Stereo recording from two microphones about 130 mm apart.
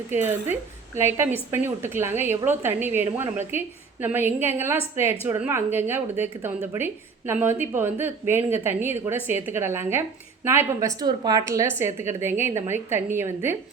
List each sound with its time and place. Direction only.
0.1 s a woman's voice: 15° right (ahead or behind)